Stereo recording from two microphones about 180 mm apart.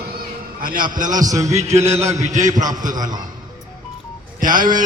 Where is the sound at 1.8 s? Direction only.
15° right (ahead or behind).